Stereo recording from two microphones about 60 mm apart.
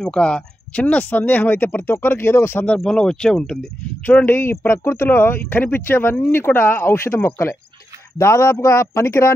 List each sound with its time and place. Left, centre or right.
0.0 s speech: centre; by 2.6 s left
2.8 s speech: centre
4.3 s speech: left
8.2 s speech: left